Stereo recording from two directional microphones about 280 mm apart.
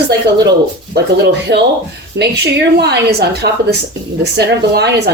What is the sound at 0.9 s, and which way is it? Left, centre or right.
A woman's voice, right.